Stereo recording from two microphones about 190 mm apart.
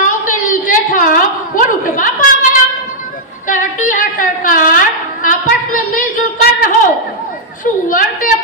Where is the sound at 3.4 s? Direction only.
40° left (ahead or behind).